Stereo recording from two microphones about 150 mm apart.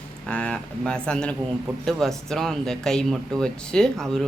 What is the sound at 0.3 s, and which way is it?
Speech, 5° left (ahead or behind).